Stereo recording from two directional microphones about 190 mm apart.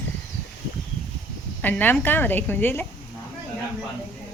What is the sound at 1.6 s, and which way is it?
A woman's voice, 10° left (ahead or behind).